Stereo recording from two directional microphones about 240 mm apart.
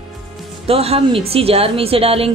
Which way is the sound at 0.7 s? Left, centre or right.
Right.